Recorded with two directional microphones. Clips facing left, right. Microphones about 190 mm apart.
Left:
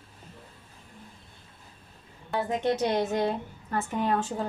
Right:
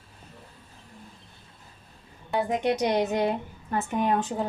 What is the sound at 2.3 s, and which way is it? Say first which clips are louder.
A woman's voice: right 2 dB; 15° right (ahead or behind).